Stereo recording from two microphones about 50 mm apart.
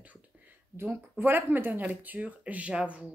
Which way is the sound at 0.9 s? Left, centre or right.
Right.